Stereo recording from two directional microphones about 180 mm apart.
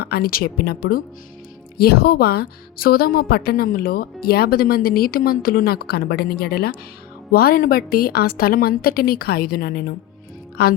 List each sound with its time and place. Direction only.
0.0 s a woman's voice: 60° left (ahead or behind)